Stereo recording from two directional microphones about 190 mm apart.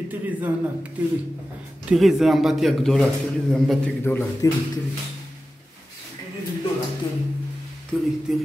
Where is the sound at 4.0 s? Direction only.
10° left (ahead or behind).